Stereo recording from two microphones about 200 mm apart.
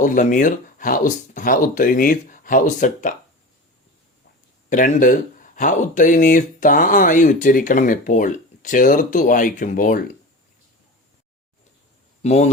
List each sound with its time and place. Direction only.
0.0 s speech: 40° left (ahead or behind)
4.7 s speech: 40° left (ahead or behind)
12.2 s speech: 35° left (ahead or behind)